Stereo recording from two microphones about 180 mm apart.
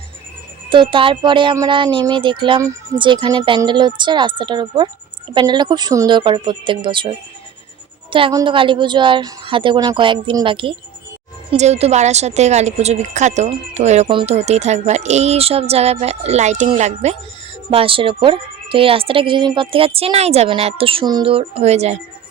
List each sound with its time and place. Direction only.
0.7 s a woman's voice: 25° right (ahead or behind)
8.1 s a woman's voice: 25° right (ahead or behind)